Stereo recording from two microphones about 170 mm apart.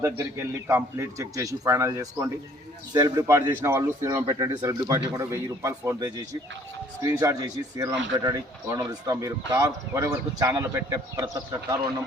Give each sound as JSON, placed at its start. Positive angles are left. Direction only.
{"t": 0.0, "sound": "a man's voice", "side_deg": -15}